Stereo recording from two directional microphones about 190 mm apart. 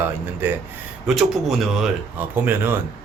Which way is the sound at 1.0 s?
Centre (ahead or behind).